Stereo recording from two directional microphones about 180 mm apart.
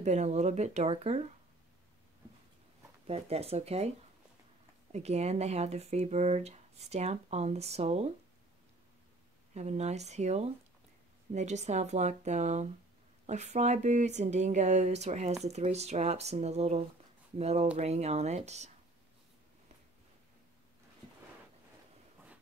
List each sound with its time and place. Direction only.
0.0 s speech: 40° right (ahead or behind)
3.1 s speech: 35° right (ahead or behind)
4.9 s speech: 35° right (ahead or behind)
9.5 s speech: 35° right (ahead or behind)